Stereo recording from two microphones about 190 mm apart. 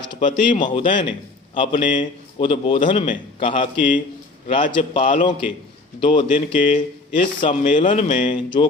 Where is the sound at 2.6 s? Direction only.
35° left (ahead or behind).